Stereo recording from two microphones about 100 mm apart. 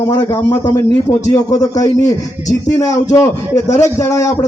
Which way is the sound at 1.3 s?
35° left (ahead or behind).